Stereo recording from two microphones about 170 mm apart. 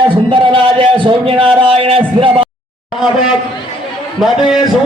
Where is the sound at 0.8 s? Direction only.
30° right (ahead or behind).